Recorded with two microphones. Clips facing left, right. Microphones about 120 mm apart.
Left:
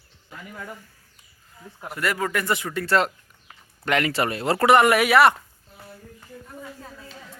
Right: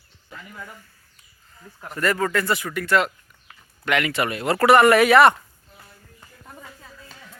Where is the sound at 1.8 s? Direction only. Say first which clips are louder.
Right 3 dB; 10° left (ahead or behind); by 4.6 s 30° left (ahead or behind).